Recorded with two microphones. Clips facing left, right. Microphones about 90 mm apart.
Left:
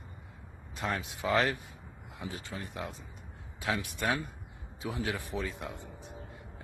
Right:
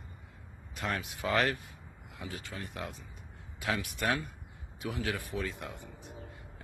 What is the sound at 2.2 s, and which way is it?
Speech, 20° left (ahead or behind).